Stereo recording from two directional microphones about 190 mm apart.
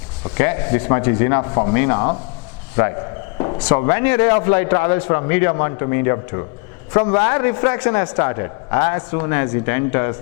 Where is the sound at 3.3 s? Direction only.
30° left (ahead or behind).